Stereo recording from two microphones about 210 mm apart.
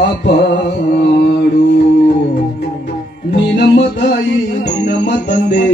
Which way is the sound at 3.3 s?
50° left (ahead or behind).